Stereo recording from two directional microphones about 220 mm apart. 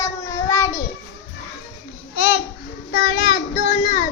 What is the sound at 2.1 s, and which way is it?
Babbling, 40° left (ahead or behind).